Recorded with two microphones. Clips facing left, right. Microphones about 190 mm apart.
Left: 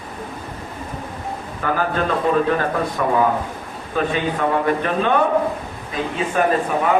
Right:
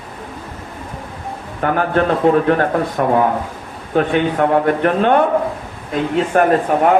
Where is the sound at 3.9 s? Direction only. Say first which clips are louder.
Right 6 dB; 65° right (ahead or behind).